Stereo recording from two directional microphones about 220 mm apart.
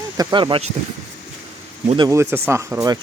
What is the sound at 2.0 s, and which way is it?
Speech, 10° right (ahead or behind).